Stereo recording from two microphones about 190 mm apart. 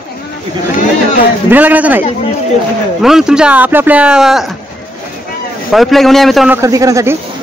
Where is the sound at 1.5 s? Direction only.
10° right (ahead or behind).